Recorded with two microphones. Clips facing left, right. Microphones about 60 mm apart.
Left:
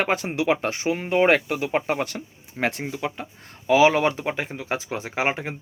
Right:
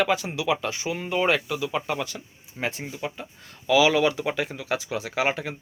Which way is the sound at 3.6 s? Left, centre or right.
Left.